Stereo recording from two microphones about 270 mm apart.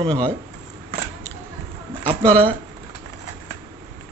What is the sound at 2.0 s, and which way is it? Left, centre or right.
Speech, right.